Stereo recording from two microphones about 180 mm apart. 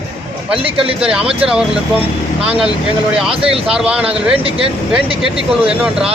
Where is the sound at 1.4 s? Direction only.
5° right (ahead or behind).